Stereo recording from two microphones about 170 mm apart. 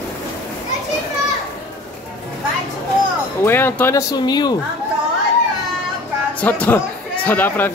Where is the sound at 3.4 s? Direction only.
10° left (ahead or behind).